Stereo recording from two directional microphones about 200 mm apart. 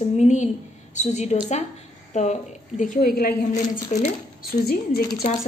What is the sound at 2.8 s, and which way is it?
A woman's voice, 45° left (ahead or behind).